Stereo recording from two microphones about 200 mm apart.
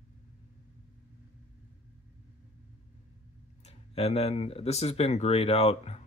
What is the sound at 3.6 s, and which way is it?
Speech, 30° left (ahead or behind).